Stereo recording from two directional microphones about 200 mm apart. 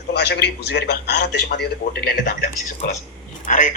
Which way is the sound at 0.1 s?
55° left (ahead or behind).